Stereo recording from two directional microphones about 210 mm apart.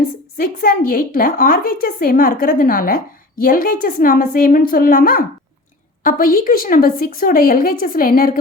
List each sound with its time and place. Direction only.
0.3 s a woman's voice: 45° left (ahead or behind)